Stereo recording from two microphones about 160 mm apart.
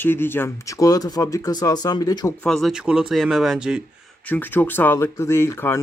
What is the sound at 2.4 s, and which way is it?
Speech, centre (ahead or behind).